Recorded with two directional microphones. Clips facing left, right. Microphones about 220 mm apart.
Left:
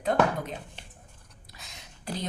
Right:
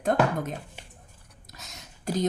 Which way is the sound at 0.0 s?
50° right (ahead or behind).